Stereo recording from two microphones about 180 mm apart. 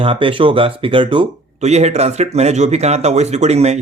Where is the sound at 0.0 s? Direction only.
30° right (ahead or behind).